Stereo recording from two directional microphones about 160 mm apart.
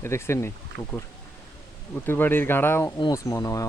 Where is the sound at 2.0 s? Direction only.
10° left (ahead or behind).